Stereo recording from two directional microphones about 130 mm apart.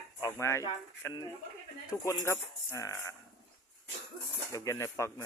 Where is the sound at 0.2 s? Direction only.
20° left (ahead or behind).